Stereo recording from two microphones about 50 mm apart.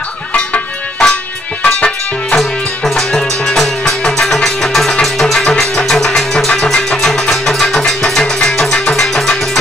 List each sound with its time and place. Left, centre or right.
1.0 s music: centre
2.3 s music: centre